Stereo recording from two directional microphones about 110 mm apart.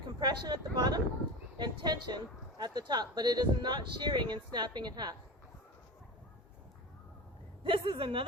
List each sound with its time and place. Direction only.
0.2 s speech: 40° right (ahead or behind)
7.6 s speech: 50° right (ahead or behind)